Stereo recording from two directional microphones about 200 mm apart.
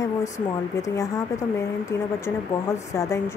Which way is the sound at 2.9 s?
15° left (ahead or behind).